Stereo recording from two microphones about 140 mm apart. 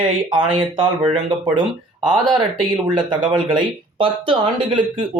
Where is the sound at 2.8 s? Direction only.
35° right (ahead or behind).